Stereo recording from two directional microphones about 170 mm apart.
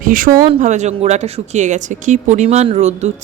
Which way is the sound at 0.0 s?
55° right (ahead or behind).